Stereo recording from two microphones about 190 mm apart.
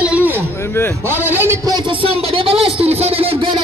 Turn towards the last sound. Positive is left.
turn(degrees=-30)  # may be behind; listen again after turning